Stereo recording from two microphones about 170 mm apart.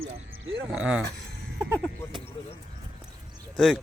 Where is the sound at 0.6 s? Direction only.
5° right (ahead or behind).